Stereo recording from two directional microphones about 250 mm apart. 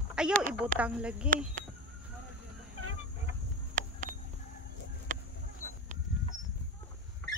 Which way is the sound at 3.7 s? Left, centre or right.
Right.